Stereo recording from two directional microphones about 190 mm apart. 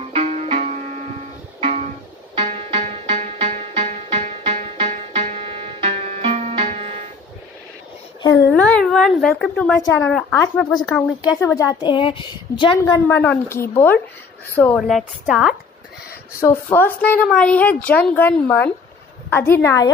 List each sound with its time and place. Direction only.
0.1 s music: 35° right (ahead or behind)
8.5 s dog: 5° left (ahead or behind)
9.4 s a woman's voice: 5° left (ahead or behind)
11.3 s a woman's voice: 15° left (ahead or behind)
12.7 s a woman's voice: 15° left (ahead or behind)
14.8 s a woman's voice: centre (ahead or behind)
16.3 s a woman's voice: 15° left (ahead or behind)